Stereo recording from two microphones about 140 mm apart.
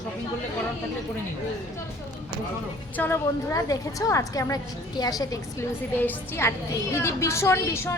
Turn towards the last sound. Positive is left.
turn(degrees=20)  # may be behind; listen again after turning